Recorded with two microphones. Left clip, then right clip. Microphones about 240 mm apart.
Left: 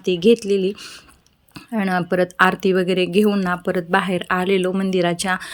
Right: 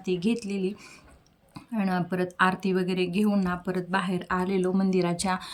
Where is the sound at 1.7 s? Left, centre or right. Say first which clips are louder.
Left 9 dB; centre.